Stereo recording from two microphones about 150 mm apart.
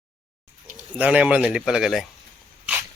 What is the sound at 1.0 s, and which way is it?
Speech, 10° right (ahead or behind).